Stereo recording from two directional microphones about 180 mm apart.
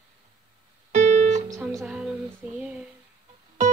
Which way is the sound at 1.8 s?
5° right (ahead or behind).